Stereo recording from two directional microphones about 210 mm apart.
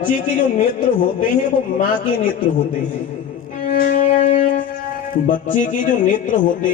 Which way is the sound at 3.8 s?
35° left (ahead or behind).